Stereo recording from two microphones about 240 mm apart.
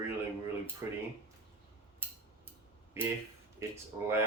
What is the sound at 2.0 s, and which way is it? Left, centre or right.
Scissors, centre.